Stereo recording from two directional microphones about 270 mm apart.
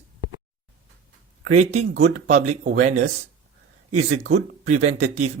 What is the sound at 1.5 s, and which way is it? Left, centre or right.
Speech, right.